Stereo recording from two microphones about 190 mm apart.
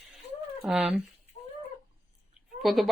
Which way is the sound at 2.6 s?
Centre (ahead or behind).